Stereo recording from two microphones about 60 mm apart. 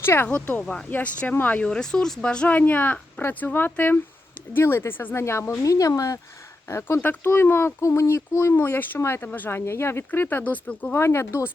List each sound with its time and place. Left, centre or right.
0.0 s speech: left
0.3 s speech: left
1.6 s speech: centre
2.6 s speech: left
4.5 s speech: left
5.2 s speech: left
5.6 s speech: left
6.7 s speech: left
8.5 s speech: left
9.5 s speech: left
10.1 s speech: left
10.9 s speech: left